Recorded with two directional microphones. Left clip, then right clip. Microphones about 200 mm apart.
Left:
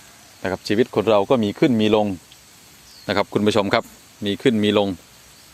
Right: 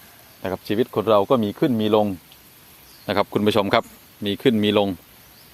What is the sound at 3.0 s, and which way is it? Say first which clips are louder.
Speech: left 1 dB; 5° left (ahead or behind).